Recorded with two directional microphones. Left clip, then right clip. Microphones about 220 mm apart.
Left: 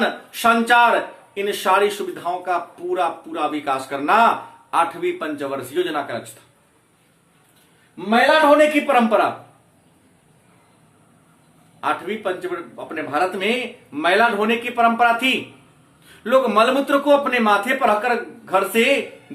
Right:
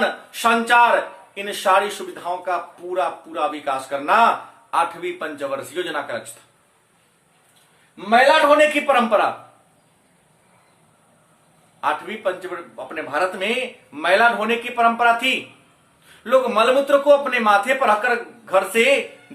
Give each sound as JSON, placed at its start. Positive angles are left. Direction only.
{"t": 0.0, "sound": "a man's voice", "side_deg": 5}
{"t": 7.9, "sound": "a man's voice", "side_deg": 0}
{"t": 11.8, "sound": "a man's voice", "side_deg": 0}